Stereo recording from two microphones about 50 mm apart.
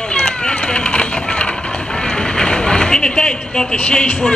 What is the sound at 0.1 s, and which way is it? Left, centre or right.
Run, centre.